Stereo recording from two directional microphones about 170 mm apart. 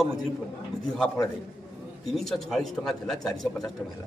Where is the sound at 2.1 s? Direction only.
Centre (ahead or behind).